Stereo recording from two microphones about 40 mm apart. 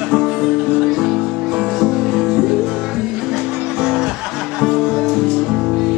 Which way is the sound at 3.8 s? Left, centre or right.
Centre.